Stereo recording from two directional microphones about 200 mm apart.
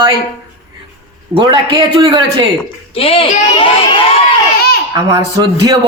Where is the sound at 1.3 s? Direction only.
25° right (ahead or behind).